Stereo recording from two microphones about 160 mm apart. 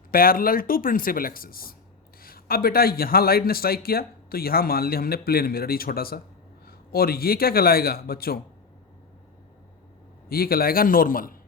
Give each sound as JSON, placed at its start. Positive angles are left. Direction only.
{"t": 0.1, "sound": "a man's voice", "side_deg": 65}
{"t": 10.2, "sound": "speech", "side_deg": 70}